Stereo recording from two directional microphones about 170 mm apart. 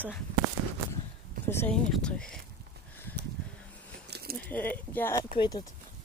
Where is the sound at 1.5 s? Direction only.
10° left (ahead or behind).